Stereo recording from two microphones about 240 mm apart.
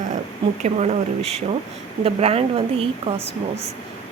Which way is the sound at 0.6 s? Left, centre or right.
Right.